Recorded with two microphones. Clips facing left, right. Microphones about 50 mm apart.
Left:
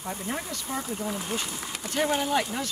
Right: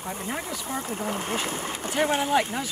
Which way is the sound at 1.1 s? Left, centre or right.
Right.